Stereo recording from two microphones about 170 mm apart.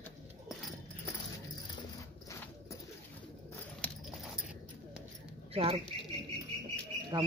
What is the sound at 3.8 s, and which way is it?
Horse, 10° left (ahead or behind).